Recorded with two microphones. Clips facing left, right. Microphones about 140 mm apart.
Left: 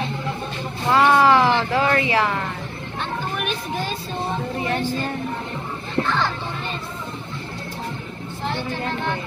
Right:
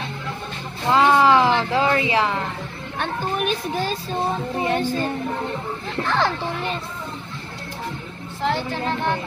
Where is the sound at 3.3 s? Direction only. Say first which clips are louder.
Right 3 dB; 35° right (ahead or behind).